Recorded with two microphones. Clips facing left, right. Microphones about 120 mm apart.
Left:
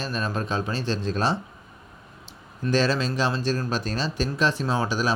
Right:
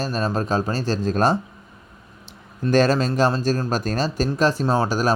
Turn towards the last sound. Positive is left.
turn(degrees=-40)  # may be behind; listen again after turning